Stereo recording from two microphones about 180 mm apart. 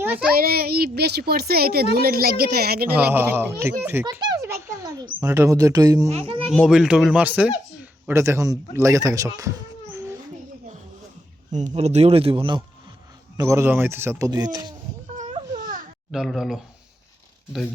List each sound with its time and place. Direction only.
0.3 s a child's voice: 55° right (ahead or behind)
3.1 s speech: 10° right (ahead or behind)
4.0 s a sound: 20° right (ahead or behind)
5.2 s speech: 15° right (ahead or behind)
6.1 s speech: 30° right (ahead or behind)
6.5 s speech: centre (ahead or behind)
11.7 s speech: 35° right (ahead or behind)
13.3 s speech: 15° right (ahead or behind)
15.0 s baby cry: 35° right (ahead or behind)
16.1 s speech: centre (ahead or behind)